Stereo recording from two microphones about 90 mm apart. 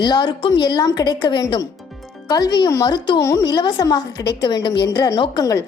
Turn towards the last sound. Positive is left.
turn(degrees=40)  # may be behind; listen again after turning